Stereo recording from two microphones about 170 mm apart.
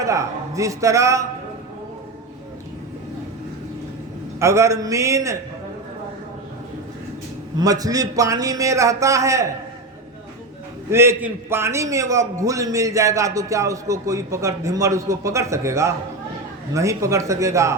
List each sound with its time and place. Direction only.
0.0 s a man's voice: 20° right (ahead or behind)
4.4 s a man's voice: 15° right (ahead or behind)
7.6 s a man's voice: 20° right (ahead or behind)
10.8 s a man's voice: 15° right (ahead or behind)